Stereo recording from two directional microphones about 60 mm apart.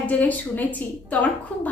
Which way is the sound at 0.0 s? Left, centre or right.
Left.